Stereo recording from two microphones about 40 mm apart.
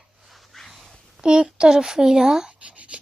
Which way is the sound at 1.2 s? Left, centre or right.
Right.